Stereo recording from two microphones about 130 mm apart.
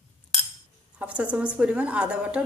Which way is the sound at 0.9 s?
10° right (ahead or behind).